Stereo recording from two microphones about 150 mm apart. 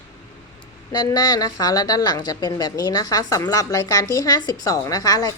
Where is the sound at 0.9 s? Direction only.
25° left (ahead or behind).